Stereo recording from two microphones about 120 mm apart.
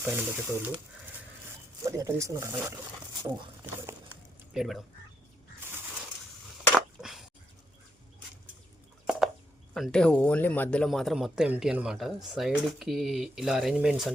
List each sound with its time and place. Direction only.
0.0 s speech: 15° right (ahead or behind)
1.8 s speech: 25° right (ahead or behind)
4.5 s speech: 5° right (ahead or behind)
6.7 s a sound: 5° right (ahead or behind)
9.0 s a sound: 5° right (ahead or behind)
9.7 s speech: 5° left (ahead or behind)
10.8 s speech: centre (ahead or behind)